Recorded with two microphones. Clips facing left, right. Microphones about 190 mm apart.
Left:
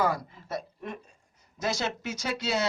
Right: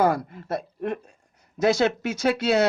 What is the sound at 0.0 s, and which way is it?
A woman's voice, 55° right (ahead or behind).